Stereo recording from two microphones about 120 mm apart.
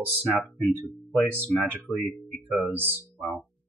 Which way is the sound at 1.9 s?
Centre (ahead or behind).